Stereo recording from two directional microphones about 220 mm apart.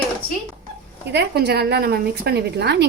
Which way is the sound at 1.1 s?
50° right (ahead or behind).